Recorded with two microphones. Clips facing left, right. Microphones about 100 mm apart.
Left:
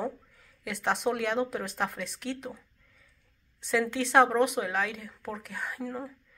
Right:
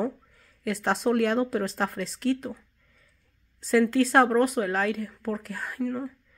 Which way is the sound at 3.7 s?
Centre (ahead or behind).